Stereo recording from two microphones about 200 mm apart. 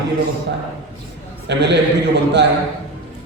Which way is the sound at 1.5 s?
60° right (ahead or behind).